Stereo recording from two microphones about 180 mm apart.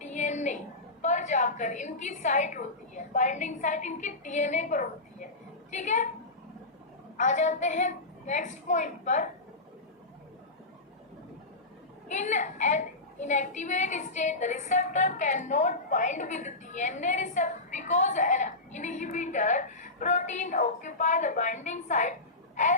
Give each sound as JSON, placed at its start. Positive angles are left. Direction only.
{"t": 0.0, "sound": "a sound", "side_deg": 40}
{"t": 1.0, "sound": "a woman's voice", "side_deg": 40}
{"t": 7.2, "sound": "a woman's voice", "side_deg": 40}
{"t": 12.0, "sound": "a woman's voice", "side_deg": 40}